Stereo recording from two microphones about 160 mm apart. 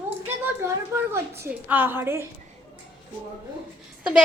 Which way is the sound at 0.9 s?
15° right (ahead or behind).